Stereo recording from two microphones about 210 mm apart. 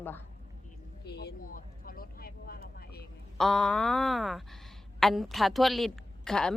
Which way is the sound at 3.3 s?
Centre (ahead or behind).